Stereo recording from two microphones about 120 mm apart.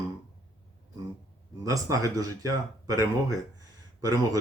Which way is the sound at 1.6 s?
30° right (ahead or behind).